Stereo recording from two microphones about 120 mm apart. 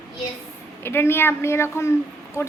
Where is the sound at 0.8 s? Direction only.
20° left (ahead or behind).